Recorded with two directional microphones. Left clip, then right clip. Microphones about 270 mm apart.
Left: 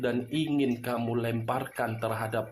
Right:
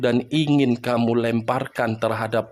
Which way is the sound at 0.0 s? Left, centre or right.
Right.